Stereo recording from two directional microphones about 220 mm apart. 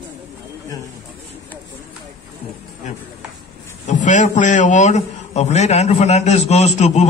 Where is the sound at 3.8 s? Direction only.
35° left (ahead or behind).